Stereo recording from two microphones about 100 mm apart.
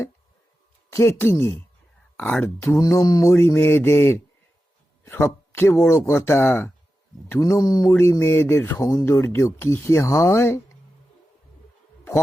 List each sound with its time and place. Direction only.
0.9 s mantra: 30° left (ahead or behind)
2.1 s speech: 15° left (ahead or behind)
2.6 s mantra: 35° left (ahead or behind)
5.0 s speech: 25° left (ahead or behind)
6.1 s mantra: 25° left (ahead or behind)
7.3 s speech: 30° left (ahead or behind)
8.2 s mantra: 25° left (ahead or behind)